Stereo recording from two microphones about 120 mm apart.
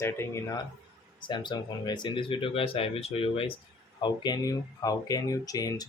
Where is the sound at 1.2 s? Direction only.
40° left (ahead or behind).